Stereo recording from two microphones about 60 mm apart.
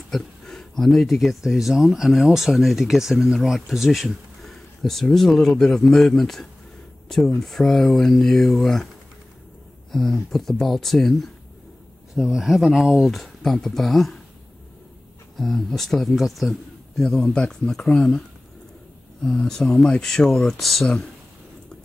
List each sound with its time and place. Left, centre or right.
0.1 s speech: centre
5.1 s speech: centre
9.9 s speech: centre
15.3 s a man's voice: centre
17.0 s speech: centre
19.2 s speech: centre